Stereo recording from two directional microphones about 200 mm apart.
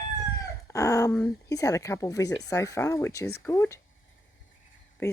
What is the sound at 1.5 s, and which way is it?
Speech, 15° left (ahead or behind).